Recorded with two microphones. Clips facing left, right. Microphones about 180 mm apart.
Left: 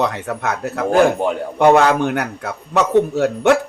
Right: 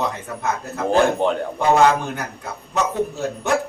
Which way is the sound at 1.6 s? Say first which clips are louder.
Left 4 dB; 75° left (ahead or behind).